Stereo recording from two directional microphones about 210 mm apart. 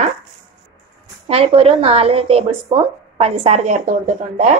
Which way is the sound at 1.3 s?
25° right (ahead or behind).